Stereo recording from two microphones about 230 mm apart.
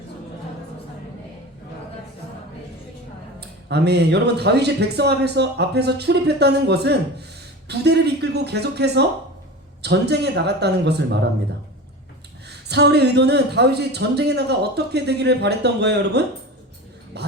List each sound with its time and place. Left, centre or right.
3.7 s a man's voice: right
12.5 s a man's voice: right
17.1 s music: right